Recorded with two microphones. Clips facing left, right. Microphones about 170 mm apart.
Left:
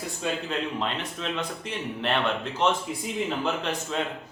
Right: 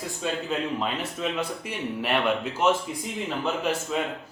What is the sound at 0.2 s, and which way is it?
Speech, 5° right (ahead or behind).